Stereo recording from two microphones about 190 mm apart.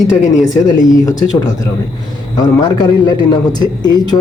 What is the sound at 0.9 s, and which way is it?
A man's voice, 20° left (ahead or behind).